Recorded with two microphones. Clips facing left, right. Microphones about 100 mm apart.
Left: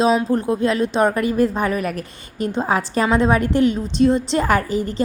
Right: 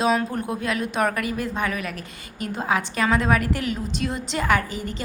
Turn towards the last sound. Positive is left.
turn(degrees=35)  # may be behind; listen again after turning